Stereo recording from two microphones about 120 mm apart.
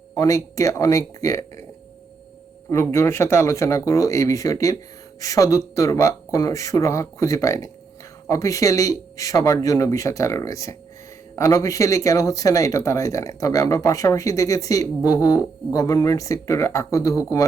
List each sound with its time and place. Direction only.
0.1 s speech: 25° left (ahead or behind)
2.6 s speech: 20° left (ahead or behind)